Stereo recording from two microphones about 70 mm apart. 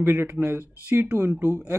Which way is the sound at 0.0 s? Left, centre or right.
Right.